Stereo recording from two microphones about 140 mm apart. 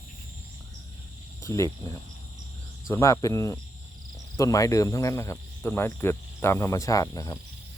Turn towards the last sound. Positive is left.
turn(degrees=25)  # may be behind; listen again after turning